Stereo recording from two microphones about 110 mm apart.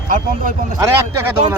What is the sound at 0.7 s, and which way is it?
Speech, 30° right (ahead or behind).